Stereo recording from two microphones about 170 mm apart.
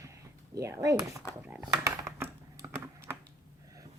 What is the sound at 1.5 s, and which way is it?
Typing, 15° right (ahead or behind).